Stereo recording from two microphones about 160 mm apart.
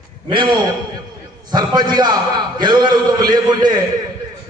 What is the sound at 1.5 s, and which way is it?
A man's voice, 25° right (ahead or behind).